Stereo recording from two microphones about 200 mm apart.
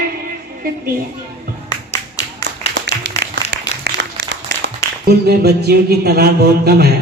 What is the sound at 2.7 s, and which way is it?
Applause, 65° right (ahead or behind).